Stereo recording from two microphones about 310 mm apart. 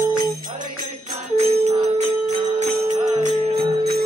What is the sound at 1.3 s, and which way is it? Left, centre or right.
Music, right.